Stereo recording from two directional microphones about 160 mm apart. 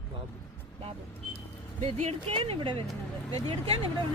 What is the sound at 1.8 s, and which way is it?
Speech, 40° right (ahead or behind).